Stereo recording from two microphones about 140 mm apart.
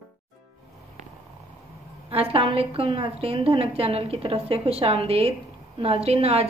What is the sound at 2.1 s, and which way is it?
A woman's voice, 45° right (ahead or behind).